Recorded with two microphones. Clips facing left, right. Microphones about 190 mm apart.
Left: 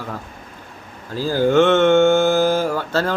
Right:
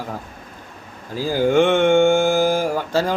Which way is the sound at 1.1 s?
15° right (ahead or behind).